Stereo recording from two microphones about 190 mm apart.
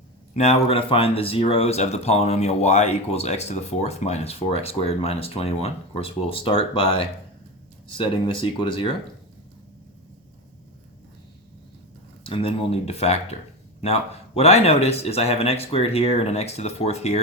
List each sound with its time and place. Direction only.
0.3 s speech: 35° left (ahead or behind)
12.2 s speech: 30° left (ahead or behind)